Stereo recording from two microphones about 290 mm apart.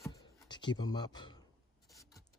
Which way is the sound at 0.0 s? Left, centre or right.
Centre.